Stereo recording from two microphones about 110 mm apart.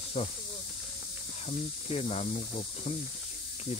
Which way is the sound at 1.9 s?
75° left (ahead or behind).